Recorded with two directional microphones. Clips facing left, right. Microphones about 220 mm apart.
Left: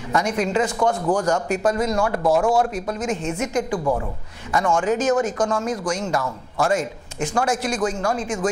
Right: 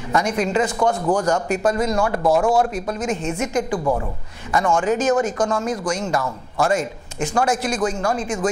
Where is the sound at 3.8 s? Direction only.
25° right (ahead or behind).